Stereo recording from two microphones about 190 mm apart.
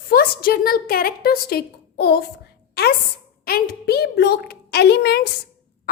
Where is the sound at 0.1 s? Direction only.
50° left (ahead or behind).